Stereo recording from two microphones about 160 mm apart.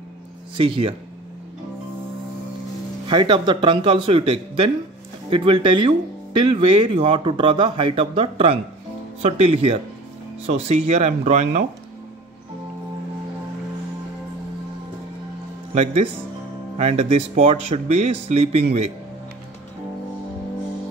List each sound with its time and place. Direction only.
0.6 s speech: 35° right (ahead or behind)
3.1 s speech: 30° right (ahead or behind)
15.7 s speech: 40° right (ahead or behind)